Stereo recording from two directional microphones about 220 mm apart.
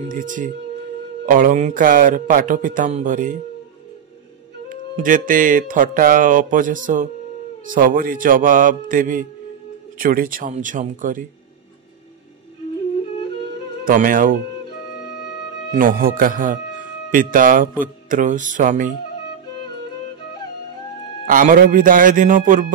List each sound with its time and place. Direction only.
0.1 s speech: 35° right (ahead or behind)
4.6 s speech: 35° right (ahead or behind)
13.8 s speech: 40° right (ahead or behind)
15.7 s speech: 40° right (ahead or behind)
21.3 s speech: 40° right (ahead or behind)